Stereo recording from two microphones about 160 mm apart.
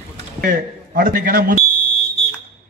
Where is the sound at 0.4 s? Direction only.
60° right (ahead or behind).